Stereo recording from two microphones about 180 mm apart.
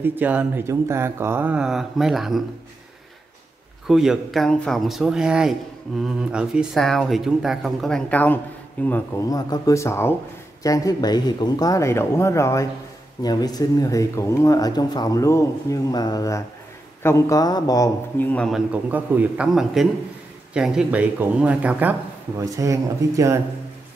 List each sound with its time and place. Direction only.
0.0 s speech: 10° right (ahead or behind)
3.8 s speech: centre (ahead or behind); by 18.3 s 20° left (ahead or behind)
18.3 s speech: 5° left (ahead or behind)
18.7 s speech: 10° right (ahead or behind)